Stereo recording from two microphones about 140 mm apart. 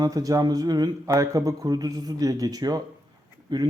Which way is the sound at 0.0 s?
25° right (ahead or behind).